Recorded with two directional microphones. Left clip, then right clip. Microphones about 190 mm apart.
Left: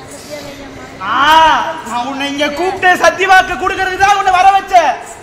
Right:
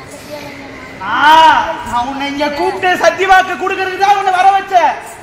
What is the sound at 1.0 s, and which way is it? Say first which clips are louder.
A man's voice: right 1 dB; 5° left (ahead or behind).